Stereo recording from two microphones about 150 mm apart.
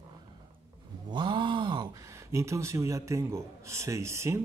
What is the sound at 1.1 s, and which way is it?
Speech, 30° right (ahead or behind).